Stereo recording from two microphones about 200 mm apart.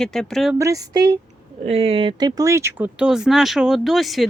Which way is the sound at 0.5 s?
15° right (ahead or behind).